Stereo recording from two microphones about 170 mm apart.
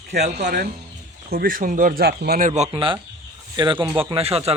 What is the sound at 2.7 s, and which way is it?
Speech, 30° right (ahead or behind).